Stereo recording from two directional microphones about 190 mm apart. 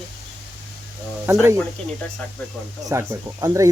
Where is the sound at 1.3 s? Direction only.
10° right (ahead or behind).